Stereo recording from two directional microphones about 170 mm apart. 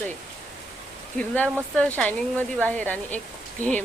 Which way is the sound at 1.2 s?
10° left (ahead or behind).